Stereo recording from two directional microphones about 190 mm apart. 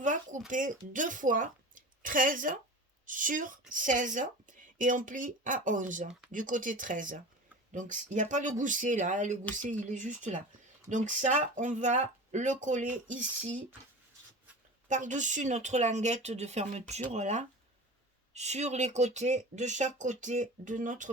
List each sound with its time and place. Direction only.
0.0 s a woman's voice: 40° right (ahead or behind)
14.8 s speech: 40° right (ahead or behind)